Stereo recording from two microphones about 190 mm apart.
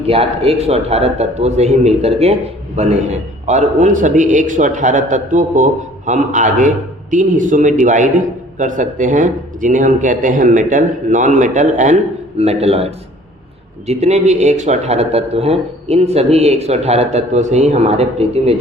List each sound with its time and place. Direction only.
0.0 s a man's voice: 30° right (ahead or behind)